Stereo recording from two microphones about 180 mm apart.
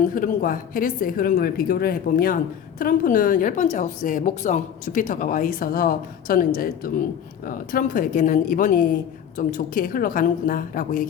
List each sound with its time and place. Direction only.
0.0 s a woman's voice: 50° left (ahead or behind)